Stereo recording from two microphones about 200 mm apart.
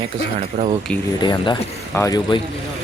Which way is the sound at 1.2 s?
20° left (ahead or behind).